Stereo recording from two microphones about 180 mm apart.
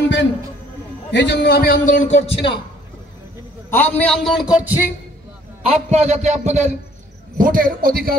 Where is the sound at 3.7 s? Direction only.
10° left (ahead or behind).